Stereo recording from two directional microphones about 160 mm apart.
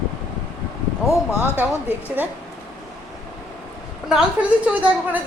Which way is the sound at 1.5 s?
10° right (ahead or behind).